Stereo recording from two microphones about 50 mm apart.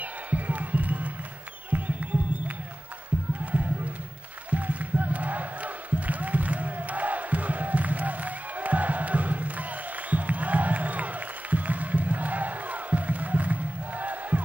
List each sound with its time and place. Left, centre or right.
0.0 s music: right
3.5 s a sound: right
4.5 s music: right